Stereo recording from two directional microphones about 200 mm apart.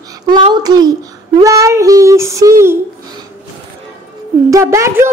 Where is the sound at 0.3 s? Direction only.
20° right (ahead or behind).